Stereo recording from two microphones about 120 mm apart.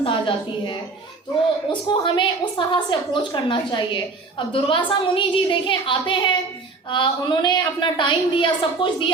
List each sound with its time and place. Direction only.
0.0 s a woman's voice: 45° left (ahead or behind)
1.9 s a woman's voice: 45° left (ahead or behind)